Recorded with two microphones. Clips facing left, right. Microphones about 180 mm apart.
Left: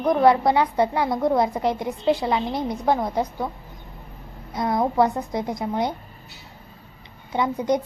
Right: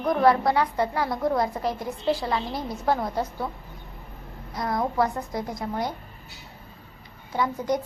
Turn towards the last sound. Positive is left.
turn(degrees=20)  # may be behind; listen again after turning